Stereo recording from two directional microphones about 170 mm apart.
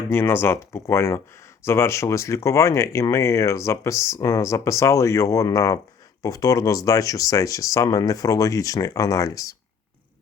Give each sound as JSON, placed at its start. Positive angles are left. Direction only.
{"t": 0.1, "sound": "speech", "side_deg": 15}